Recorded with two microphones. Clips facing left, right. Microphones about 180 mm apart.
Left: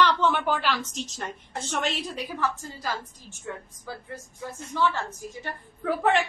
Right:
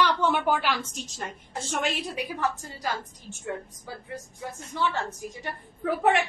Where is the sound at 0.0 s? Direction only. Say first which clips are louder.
Left 1 dB; 10° right (ahead or behind).